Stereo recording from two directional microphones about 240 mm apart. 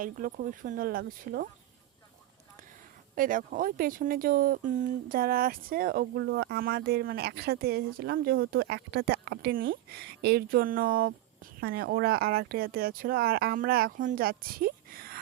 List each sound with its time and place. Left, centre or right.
0.0 s speech: right
3.2 s speech: right